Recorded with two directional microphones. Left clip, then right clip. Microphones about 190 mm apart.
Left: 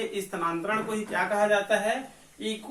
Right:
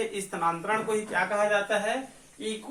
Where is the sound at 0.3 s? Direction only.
10° right (ahead or behind).